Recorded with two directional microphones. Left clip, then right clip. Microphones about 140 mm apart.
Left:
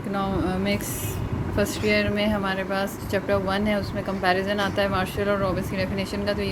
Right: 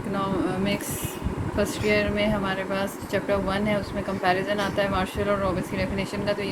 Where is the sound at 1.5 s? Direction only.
45° left (ahead or behind).